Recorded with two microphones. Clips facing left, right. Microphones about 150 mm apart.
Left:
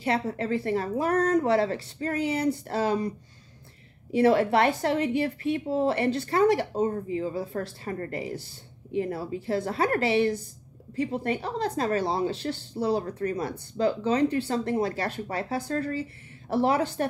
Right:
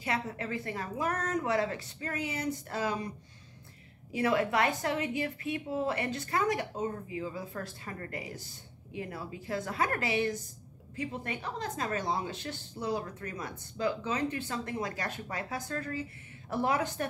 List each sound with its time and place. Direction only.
0.0 s a woman's voice: 30° left (ahead or behind)
4.1 s a woman's voice: 30° left (ahead or behind)